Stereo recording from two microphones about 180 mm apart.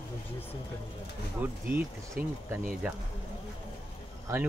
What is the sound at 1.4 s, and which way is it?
Speech, 10° right (ahead or behind).